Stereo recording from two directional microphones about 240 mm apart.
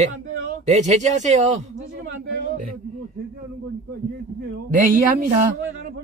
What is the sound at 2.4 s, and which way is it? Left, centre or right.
Speech, right.